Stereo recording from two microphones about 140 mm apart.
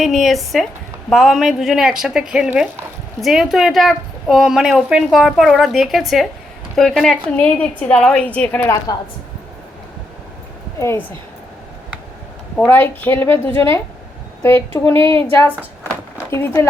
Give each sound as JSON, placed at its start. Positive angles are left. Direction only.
{"t": 0.0, "sound": "a woman's voice", "side_deg": 0}
{"t": 10.8, "sound": "speech", "side_deg": 20}
{"t": 12.5, "sound": "a woman's voice", "side_deg": 10}
{"t": 16.3, "sound": "speech", "side_deg": 20}